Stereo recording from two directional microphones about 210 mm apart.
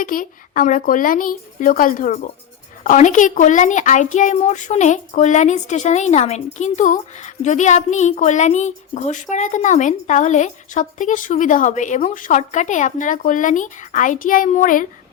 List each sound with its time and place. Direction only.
0.0 s a woman's voice: 40° left (ahead or behind)